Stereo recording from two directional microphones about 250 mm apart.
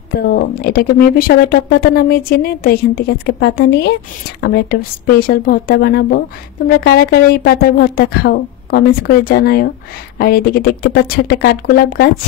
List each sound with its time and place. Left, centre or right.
0.3 s speech: left